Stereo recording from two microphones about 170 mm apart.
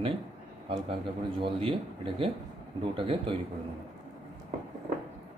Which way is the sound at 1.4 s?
30° right (ahead or behind).